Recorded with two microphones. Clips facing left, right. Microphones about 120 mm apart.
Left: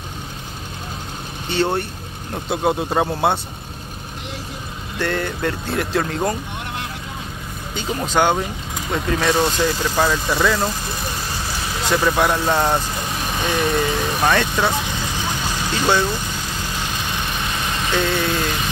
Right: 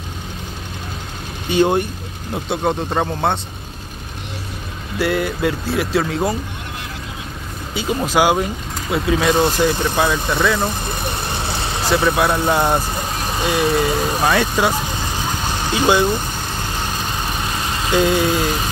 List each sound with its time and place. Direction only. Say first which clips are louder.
1.5 s speech: right 5 dB; 15° right (ahead or behind)
2.3 s speech: even; 5° left (ahead or behind)
4.9 s speech: right 4 dB; 10° right (ahead or behind)
7.7 s speech: right 3 dB; 10° right (ahead or behind)
10.3 s speech: even; centre (ahead or behind)
11.9 s speech: right 1 dB; 10° right (ahead or behind)
17.9 s speech: right 5 dB; 15° right (ahead or behind)